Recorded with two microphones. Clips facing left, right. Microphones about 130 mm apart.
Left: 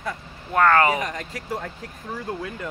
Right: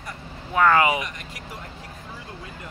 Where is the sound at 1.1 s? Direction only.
90° left.